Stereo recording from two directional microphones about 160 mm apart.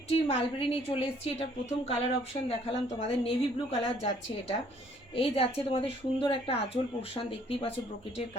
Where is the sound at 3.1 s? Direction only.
35° left (ahead or behind).